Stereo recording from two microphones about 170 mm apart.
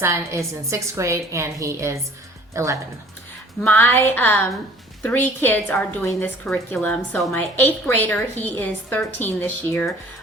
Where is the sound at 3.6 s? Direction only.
15° left (ahead or behind).